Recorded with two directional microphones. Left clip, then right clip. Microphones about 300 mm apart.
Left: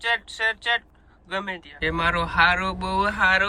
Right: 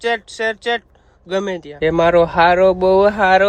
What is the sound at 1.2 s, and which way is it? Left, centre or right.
Speech, centre.